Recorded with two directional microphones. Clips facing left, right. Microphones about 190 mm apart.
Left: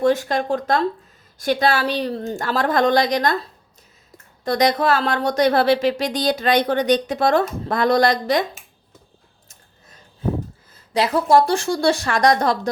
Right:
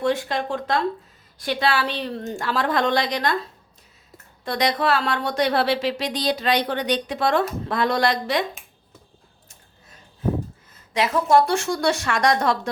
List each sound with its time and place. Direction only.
0.0 s speech: 45° left (ahead or behind)
4.4 s speech: 45° left (ahead or behind)
10.9 s a woman's voice: 35° left (ahead or behind)